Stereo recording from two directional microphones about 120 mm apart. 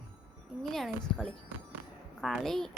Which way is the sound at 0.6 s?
Centre (ahead or behind).